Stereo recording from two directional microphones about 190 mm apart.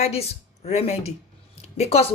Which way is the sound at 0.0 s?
35° left (ahead or behind).